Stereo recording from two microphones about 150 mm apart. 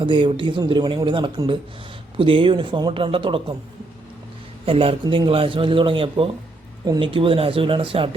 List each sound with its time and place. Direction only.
0.0 s a man's voice: 35° right (ahead or behind)
4.6 s a man's voice: 40° right (ahead or behind)